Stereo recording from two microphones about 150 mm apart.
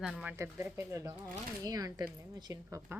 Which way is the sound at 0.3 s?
20° right (ahead or behind).